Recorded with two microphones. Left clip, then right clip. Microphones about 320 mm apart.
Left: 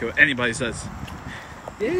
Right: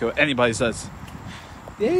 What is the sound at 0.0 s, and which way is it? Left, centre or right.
Speech, centre.